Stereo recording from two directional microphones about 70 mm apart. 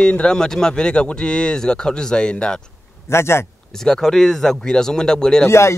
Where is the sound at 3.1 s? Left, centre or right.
Left.